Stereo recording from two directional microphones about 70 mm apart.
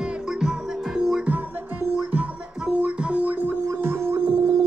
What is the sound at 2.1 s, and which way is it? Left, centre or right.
Music, right.